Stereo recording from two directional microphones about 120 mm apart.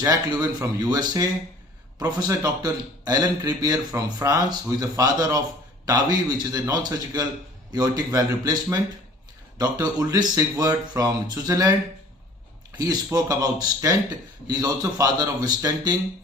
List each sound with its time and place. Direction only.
0.1 s a man's voice: 30° right (ahead or behind)
12.7 s a man's voice: 35° right (ahead or behind)